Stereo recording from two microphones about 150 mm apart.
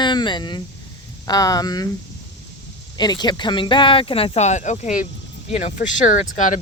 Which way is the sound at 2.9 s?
30° left (ahead or behind).